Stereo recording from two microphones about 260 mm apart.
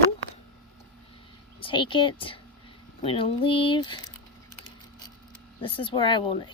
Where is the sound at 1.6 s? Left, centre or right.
Centre.